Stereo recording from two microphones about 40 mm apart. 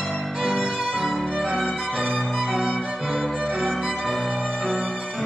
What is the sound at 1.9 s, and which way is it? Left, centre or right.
Violin, right.